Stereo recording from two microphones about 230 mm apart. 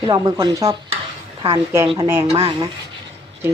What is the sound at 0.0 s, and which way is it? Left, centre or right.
A woman's voice, centre.